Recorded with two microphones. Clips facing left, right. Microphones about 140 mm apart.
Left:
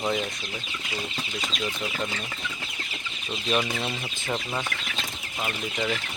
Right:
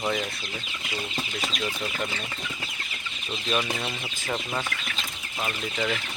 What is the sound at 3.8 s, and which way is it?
Speech, centre (ahead or behind).